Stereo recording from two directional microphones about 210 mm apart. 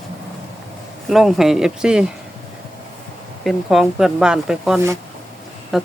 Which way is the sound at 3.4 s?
Centre (ahead or behind).